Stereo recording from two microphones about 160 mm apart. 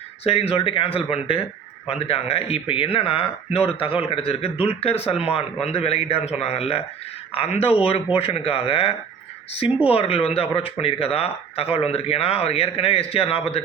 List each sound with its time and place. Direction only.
0.3 s speech: 40° left (ahead or behind)